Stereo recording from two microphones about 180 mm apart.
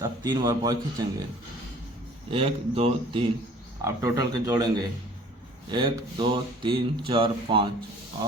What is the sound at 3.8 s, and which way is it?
Speech, 20° right (ahead or behind).